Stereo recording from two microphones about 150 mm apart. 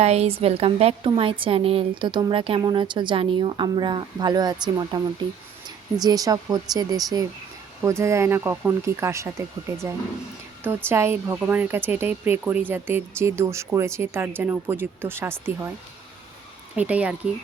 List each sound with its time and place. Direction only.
0.0 s a woman's voice: 45° right (ahead or behind); by 9.3 s 20° right (ahead or behind)
10.6 s speech: 15° right (ahead or behind)
16.7 s speech: 10° right (ahead or behind)